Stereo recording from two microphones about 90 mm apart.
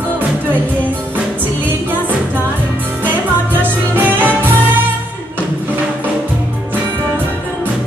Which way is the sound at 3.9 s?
20° right (ahead or behind).